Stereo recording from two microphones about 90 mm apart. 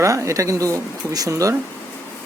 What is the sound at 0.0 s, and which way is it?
Speech, 35° right (ahead or behind).